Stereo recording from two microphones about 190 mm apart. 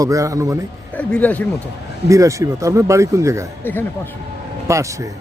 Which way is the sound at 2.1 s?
15° right (ahead or behind).